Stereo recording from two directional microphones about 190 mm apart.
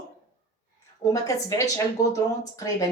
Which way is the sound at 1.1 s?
15° left (ahead or behind).